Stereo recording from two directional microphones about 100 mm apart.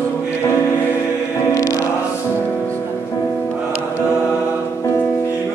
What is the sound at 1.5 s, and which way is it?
Music, 35° left (ahead or behind).